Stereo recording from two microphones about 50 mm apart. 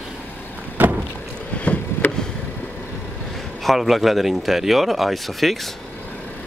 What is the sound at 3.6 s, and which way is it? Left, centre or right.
Speech, centre.